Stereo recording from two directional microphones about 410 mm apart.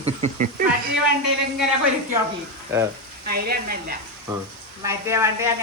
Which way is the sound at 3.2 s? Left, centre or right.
Right.